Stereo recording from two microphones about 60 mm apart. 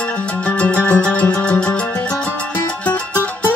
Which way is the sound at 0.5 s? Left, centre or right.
Left.